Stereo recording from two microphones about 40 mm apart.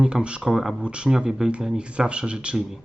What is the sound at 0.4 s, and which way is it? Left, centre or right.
Speech, centre.